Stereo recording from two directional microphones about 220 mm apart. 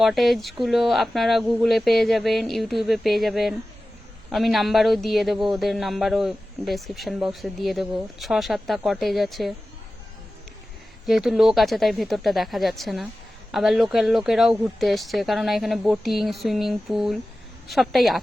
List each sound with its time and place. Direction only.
0.0 s speech: centre (ahead or behind)
11.0 s speech: centre (ahead or behind)